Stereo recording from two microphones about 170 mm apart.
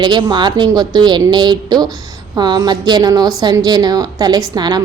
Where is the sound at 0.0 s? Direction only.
25° right (ahead or behind).